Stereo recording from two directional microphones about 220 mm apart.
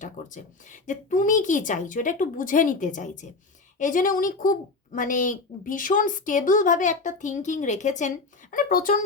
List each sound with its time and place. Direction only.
0.0 s a woman's voice: 35° left (ahead or behind)